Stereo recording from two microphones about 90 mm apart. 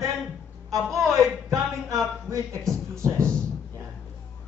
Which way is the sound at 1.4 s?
40° right (ahead or behind).